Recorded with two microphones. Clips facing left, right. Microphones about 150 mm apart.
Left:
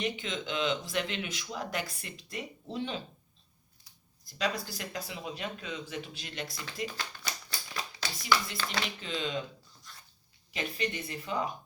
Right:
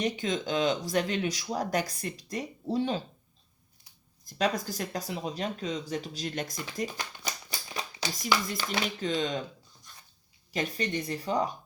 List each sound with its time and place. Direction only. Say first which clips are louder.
0.0 s speech: right 5 dB; 40° right (ahead or behind)
4.4 s speech: right 5 dB; 45° right (ahead or behind)
6.8 s shuffling cards: right 2 dB; 15° right (ahead or behind)
8.6 s speech: right 2 dB; 10° right (ahead or behind)
9.0 s speech: right 5 dB; 40° right (ahead or behind)
10.5 s speech: right 4 dB; 40° right (ahead or behind)